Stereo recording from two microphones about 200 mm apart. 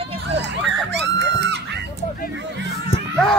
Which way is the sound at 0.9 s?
60° right (ahead or behind).